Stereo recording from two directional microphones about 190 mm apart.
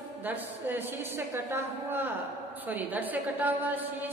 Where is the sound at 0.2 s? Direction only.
10° right (ahead or behind).